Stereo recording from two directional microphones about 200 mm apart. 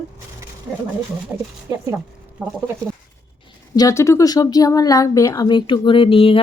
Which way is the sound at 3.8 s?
15° left (ahead or behind).